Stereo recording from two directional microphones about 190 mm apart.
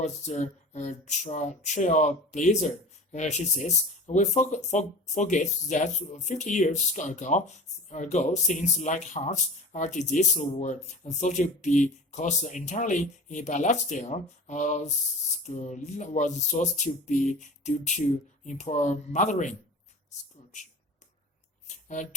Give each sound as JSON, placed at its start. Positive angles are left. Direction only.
{"t": 0.0, "sound": "speech", "side_deg": 35}